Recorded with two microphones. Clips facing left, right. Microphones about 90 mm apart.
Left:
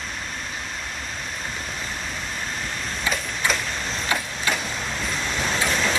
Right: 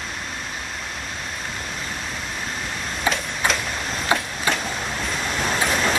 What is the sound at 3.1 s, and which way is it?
Tick-tock, 40° right (ahead or behind).